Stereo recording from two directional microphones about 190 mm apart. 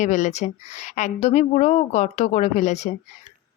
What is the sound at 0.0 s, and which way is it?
A woman's voice, 40° left (ahead or behind).